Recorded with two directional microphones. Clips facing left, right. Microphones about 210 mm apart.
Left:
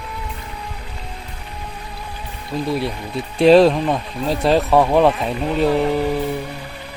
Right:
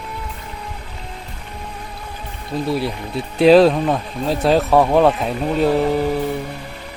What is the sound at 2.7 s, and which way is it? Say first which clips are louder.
Speech: right 1 dB; centre (ahead or behind).